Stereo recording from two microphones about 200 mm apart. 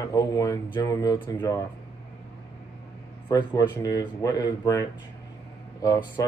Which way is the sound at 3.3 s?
20° left (ahead or behind).